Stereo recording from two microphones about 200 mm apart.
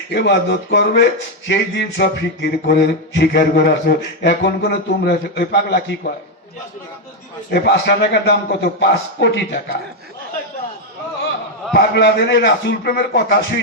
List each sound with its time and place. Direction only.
0.1 s speech: 55° left (ahead or behind)
7.5 s speech: 55° left (ahead or behind)
11.7 s speech: 55° left (ahead or behind)